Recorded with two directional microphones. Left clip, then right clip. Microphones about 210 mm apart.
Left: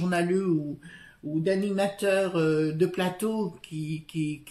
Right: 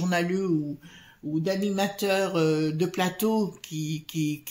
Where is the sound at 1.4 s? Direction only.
30° right (ahead or behind).